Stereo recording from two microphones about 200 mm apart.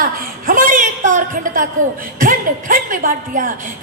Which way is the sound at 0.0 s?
45° right (ahead or behind).